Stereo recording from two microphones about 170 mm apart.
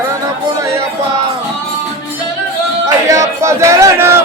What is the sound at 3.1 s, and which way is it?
Speech, 20° right (ahead or behind).